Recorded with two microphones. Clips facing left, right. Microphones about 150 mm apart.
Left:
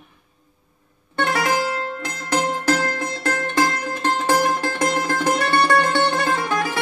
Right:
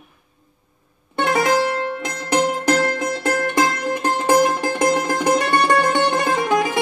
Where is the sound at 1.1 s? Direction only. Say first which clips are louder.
Right 3 dB; 15° right (ahead or behind).